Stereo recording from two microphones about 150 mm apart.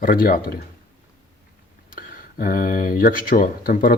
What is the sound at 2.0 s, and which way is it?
Speech, 70° left (ahead or behind).